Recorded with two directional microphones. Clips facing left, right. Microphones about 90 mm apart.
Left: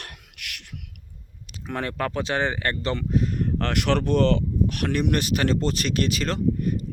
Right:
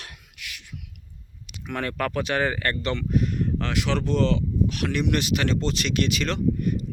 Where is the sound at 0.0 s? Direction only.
65° left (ahead or behind).